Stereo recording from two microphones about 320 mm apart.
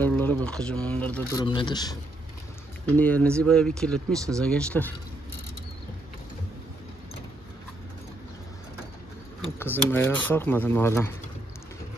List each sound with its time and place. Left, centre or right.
0.0 s speech: centre
9.6 s speech: centre